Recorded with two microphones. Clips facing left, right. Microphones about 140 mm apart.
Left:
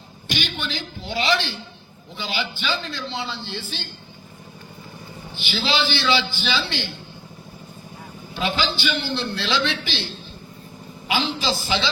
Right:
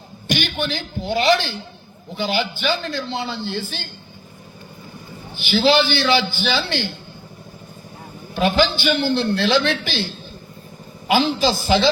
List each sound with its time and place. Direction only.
0.3 s a man's voice: 50° right (ahead or behind)
5.4 s a man's voice: 50° right (ahead or behind)
8.4 s a man's voice: 50° right (ahead or behind)